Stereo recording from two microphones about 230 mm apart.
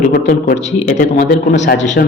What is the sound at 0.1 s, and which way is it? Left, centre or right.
A man's voice, left.